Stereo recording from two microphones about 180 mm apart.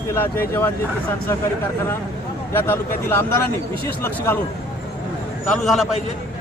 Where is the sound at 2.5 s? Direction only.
10° left (ahead or behind).